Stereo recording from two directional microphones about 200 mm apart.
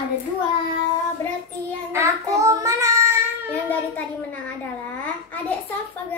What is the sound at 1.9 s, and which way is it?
Child singing, 15° right (ahead or behind).